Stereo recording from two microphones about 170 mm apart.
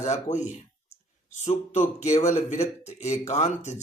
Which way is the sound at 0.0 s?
45° left (ahead or behind).